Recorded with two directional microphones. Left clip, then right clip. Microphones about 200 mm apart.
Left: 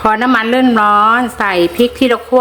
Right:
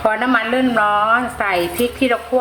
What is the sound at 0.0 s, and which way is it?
A woman's voice, 55° left (ahead or behind).